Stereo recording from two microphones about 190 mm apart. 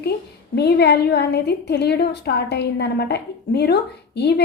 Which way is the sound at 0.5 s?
60° left (ahead or behind).